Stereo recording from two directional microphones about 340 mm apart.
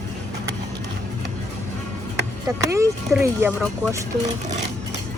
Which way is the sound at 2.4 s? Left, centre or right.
Centre.